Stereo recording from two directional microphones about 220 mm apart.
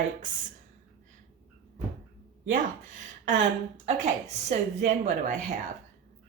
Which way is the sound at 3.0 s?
35° right (ahead or behind).